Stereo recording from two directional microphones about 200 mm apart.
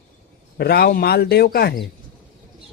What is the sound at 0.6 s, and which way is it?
Speech, 50° left (ahead or behind).